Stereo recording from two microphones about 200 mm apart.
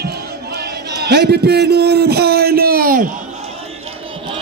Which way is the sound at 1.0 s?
55° right (ahead or behind).